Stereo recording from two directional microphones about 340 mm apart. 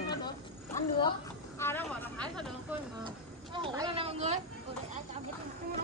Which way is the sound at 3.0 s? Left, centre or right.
Centre.